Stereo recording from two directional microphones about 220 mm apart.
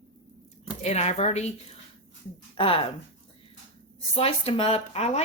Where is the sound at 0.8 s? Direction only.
30° left (ahead or behind).